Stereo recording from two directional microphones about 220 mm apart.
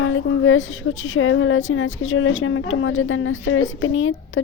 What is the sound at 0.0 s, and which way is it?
A woman's voice, 65° left (ahead or behind).